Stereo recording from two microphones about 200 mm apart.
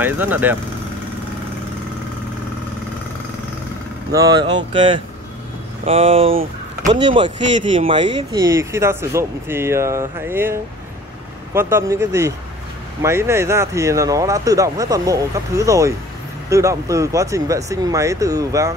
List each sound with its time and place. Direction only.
0.0 s speech: 10° right (ahead or behind)
4.1 s speech: 20° right (ahead or behind)